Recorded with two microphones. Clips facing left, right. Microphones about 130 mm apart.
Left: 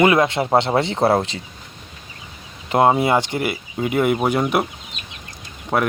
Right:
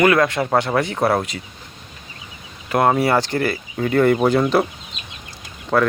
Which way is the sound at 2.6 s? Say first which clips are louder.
Left 1 dB; 20° left (ahead or behind).